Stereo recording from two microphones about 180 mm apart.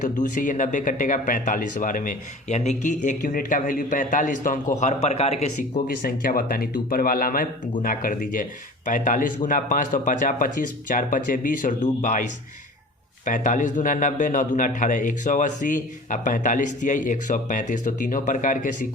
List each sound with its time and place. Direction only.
0.0 s speech: 45° left (ahead or behind)
6.1 s speech: 55° left (ahead or behind)
13.2 s speech: 45° left (ahead or behind)